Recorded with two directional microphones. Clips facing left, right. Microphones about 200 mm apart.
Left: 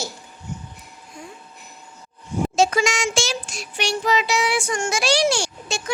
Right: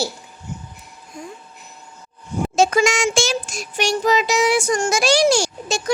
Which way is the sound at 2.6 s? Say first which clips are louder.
Right 4 dB; 50° right (ahead or behind).